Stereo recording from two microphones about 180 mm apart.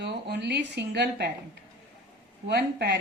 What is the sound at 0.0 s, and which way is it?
A woman's voice, 70° right (ahead or behind).